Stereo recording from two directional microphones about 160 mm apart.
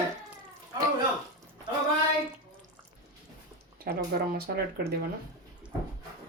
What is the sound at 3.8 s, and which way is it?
Speech, 75° right (ahead or behind).